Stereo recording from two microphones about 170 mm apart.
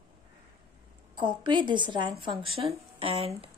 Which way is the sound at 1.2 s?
30° right (ahead or behind).